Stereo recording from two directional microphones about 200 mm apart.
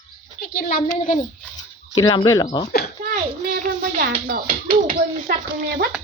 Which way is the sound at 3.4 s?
45° right (ahead or behind).